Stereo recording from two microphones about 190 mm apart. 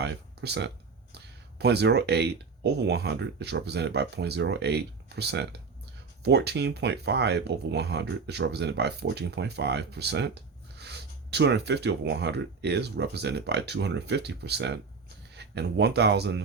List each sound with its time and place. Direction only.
0.0 s speech: 60° right (ahead or behind)